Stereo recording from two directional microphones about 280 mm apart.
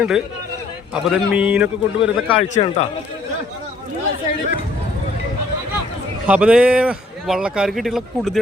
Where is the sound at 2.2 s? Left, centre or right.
Centre.